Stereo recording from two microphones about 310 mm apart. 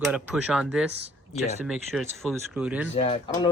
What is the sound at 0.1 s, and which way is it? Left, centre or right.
Speech, centre.